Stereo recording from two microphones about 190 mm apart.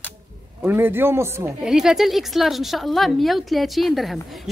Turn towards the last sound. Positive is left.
turn(degrees=0)  # may be behind; listen again after turning